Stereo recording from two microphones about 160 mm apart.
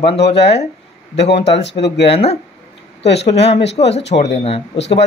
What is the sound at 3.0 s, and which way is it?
Speech, 90° left.